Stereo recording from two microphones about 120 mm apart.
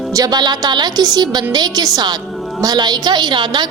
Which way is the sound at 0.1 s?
30° right (ahead or behind).